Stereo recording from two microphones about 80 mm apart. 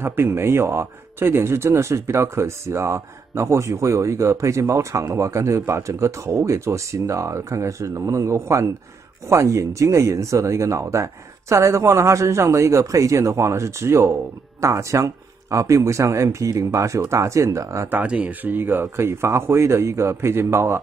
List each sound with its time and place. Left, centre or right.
0.0 s speech: right
17.8 s speech: centre